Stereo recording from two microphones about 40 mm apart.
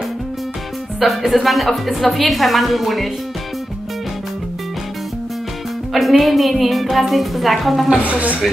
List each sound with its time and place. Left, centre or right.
0.9 s a woman's voice: centre
5.9 s a woman's voice: centre
8.0 s speech: right